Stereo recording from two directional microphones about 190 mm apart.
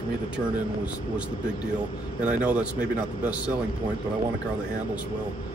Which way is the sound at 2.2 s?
5° right (ahead or behind).